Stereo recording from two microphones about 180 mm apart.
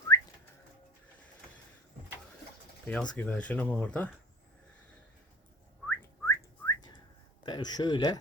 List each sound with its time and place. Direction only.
0.1 s whistling: 20° left (ahead or behind)
2.8 s speech: 5° left (ahead or behind)
5.9 s whistling: 15° left (ahead or behind)
7.4 s speech: 25° left (ahead or behind)